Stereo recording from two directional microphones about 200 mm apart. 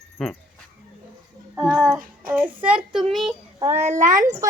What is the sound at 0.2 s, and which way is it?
Speech, 5° left (ahead or behind).